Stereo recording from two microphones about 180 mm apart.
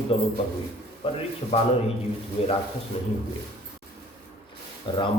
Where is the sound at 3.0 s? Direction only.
35° left (ahead or behind).